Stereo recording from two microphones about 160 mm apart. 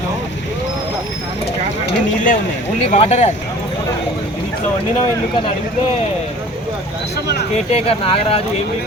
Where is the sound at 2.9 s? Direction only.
40° left (ahead or behind).